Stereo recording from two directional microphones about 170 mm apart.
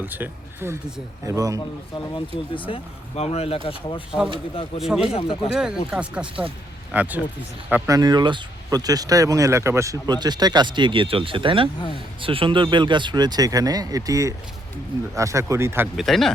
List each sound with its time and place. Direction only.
0.0 s speech: 10° right (ahead or behind)
2.1 s speech: 30° left (ahead or behind)
4.8 s speech: 5° right (ahead or behind)
5.1 s speech: 35° left (ahead or behind)
5.5 s speech: 5° right (ahead or behind)
7.7 s speech: 20° right (ahead or behind)
16.0 s speech: centre (ahead or behind)